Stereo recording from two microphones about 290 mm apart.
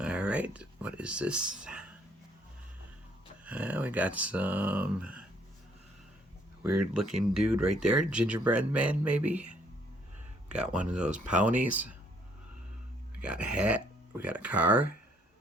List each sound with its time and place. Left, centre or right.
0.0 s a sound: centre
3.4 s speech: centre
6.7 s speech: right
7.0 s speech: centre
13.2 s speech: centre